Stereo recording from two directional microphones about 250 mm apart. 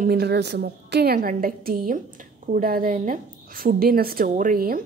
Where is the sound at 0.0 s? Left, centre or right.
Right.